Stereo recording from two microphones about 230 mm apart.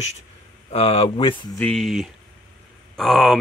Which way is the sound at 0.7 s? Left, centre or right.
Left.